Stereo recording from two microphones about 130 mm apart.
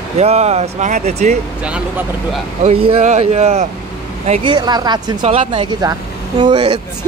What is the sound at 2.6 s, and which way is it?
Speech, 45° right (ahead or behind).